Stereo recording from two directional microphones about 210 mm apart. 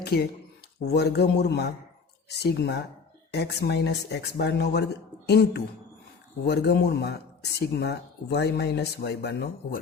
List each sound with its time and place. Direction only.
0.0 s speech: 50° left (ahead or behind)